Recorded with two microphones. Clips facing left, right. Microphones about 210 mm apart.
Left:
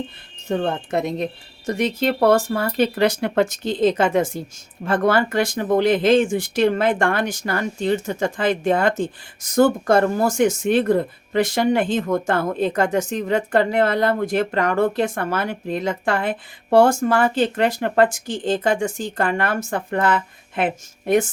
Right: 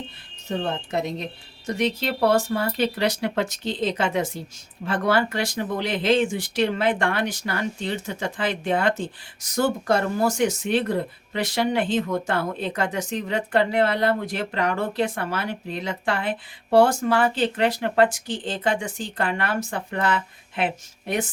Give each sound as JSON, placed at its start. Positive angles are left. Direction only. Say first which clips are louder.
{"t": 0.4, "sound": "speech", "louder": "left 5 dB", "side_deg": 50}